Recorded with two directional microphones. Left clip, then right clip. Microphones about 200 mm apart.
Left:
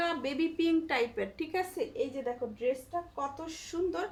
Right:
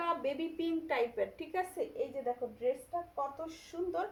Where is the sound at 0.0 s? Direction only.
35° left (ahead or behind).